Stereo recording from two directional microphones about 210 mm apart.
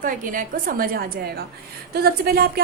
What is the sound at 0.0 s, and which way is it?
A woman's voice, 40° right (ahead or behind).